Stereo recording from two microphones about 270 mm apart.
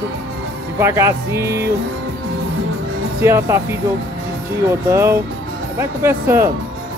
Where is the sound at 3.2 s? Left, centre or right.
Centre.